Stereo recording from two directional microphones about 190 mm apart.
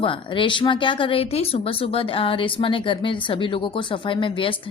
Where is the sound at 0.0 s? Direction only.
25° left (ahead or behind).